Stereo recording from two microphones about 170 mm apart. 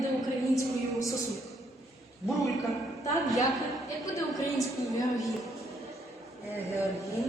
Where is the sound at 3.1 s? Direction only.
Centre (ahead or behind).